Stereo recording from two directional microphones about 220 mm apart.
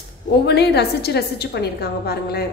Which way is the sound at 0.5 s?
50° left (ahead or behind).